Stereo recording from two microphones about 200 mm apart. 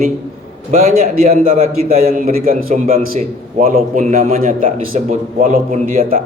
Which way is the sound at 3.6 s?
40° right (ahead or behind).